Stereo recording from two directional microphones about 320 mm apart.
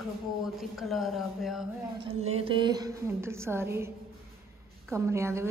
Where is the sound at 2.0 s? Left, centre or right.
Centre.